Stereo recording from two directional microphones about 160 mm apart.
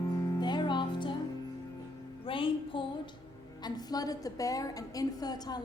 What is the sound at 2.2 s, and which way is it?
Music, 35° left (ahead or behind).